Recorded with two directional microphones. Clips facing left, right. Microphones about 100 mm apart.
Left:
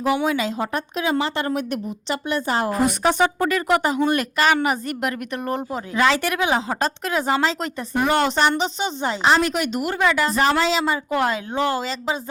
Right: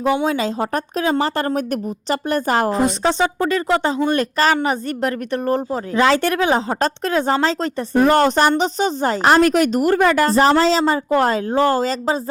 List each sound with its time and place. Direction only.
0.0 s a woman's voice: 30° right (ahead or behind); by 2.7 s 45° right (ahead or behind)
3.0 s a woman's voice: 15° left (ahead or behind)
3.2 s a woman's voice: 25° right (ahead or behind)